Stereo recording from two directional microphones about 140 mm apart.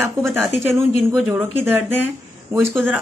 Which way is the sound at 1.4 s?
15° right (ahead or behind).